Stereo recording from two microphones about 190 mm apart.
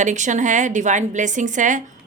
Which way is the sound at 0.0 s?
40° right (ahead or behind).